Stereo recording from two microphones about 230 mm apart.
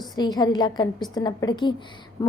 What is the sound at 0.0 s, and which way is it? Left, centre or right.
A woman's voice, centre.